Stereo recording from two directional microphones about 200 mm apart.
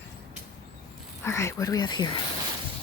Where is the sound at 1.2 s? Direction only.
15° left (ahead or behind).